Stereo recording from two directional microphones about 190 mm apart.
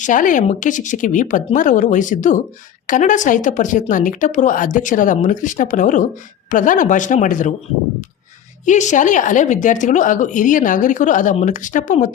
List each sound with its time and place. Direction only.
0.0 s a woman's voice: 45° left (ahead or behind)
8.6 s speech: 40° left (ahead or behind)